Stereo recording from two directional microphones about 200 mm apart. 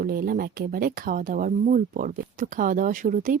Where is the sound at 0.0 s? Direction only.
45° right (ahead or behind).